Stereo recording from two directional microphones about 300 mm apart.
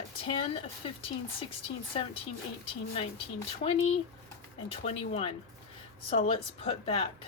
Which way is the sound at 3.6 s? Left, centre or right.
Centre.